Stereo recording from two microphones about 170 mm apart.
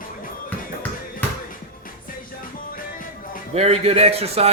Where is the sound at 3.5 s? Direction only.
40° right (ahead or behind).